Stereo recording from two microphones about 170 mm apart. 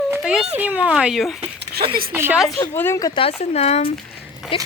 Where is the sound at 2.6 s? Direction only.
15° left (ahead or behind).